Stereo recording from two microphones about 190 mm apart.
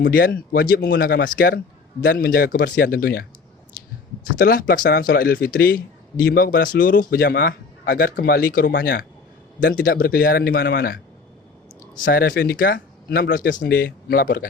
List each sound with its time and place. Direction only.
0.0 s speech: 55° left (ahead or behind)
4.4 s speech: 50° left (ahead or behind)
9.6 s speech: 50° left (ahead or behind)
11.9 s speech: 50° left (ahead or behind)
13.7 s speech: 55° left (ahead or behind)